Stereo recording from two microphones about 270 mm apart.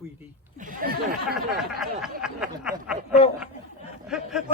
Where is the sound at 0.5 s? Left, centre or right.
Right.